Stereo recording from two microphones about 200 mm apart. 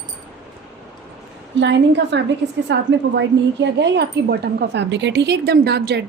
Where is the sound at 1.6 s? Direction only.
60° right (ahead or behind).